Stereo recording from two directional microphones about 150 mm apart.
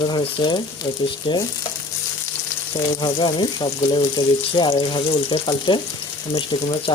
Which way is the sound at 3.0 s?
30° left (ahead or behind).